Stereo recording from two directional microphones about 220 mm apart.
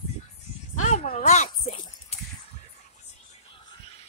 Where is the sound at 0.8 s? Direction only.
35° left (ahead or behind).